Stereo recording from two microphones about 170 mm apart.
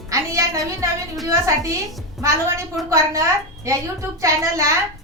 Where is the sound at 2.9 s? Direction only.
15° right (ahead or behind).